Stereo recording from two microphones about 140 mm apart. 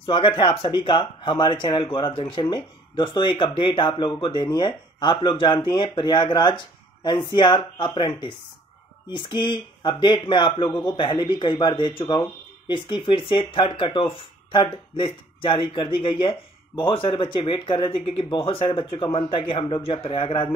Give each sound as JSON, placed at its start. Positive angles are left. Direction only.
{"t": 0.0, "sound": "speech", "side_deg": 35}